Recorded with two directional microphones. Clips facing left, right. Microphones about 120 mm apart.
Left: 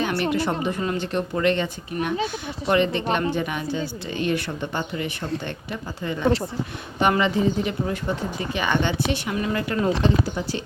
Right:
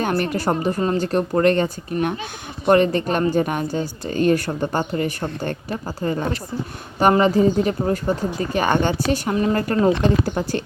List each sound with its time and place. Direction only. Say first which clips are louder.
0.3 s a woman's voice: right 3 dB; 40° right (ahead or behind)